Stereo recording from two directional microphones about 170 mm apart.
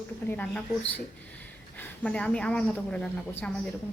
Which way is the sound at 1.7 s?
5° left (ahead or behind).